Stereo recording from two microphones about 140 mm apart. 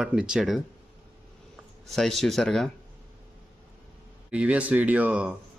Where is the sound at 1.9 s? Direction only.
Centre (ahead or behind).